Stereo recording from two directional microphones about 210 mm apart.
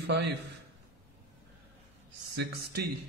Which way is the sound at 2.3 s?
50° right (ahead or behind).